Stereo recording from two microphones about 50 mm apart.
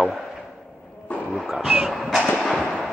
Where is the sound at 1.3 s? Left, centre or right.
Centre.